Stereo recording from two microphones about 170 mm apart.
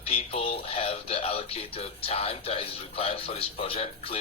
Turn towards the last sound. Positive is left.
turn(degrees=35)  # may be behind; listen again after turning